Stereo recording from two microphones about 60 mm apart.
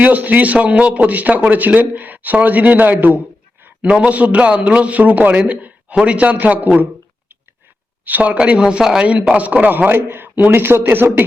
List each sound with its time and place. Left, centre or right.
0.0 s a man's voice: right
3.8 s a man's voice: centre
8.0 s a man's voice: right
8.4 s speech: centre
9.3 s a man's voice: right